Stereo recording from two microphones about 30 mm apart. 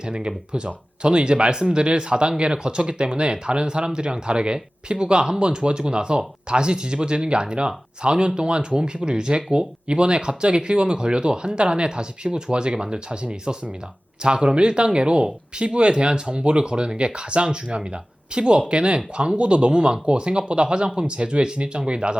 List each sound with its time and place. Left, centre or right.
0.0 s speech: right
14.2 s speech: right